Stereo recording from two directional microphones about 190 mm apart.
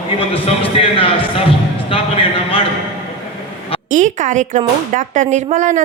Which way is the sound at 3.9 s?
40° right (ahead or behind).